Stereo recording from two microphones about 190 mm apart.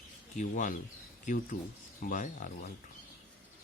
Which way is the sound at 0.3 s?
40° left (ahead or behind).